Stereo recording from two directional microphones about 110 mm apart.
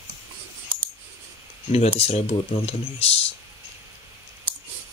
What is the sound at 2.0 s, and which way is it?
Speech, 65° left (ahead or behind).